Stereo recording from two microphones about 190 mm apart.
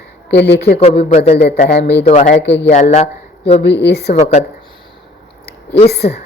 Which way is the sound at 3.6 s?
65° left (ahead or behind).